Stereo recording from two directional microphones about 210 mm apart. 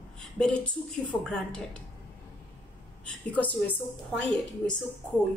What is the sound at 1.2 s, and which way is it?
Speech, 5° left (ahead or behind).